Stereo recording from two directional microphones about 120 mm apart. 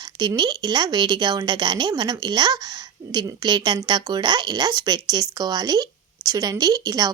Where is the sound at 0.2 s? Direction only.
35° right (ahead or behind).